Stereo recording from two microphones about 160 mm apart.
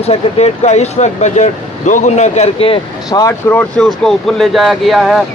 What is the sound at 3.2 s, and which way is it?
Speech, 15° left (ahead or behind).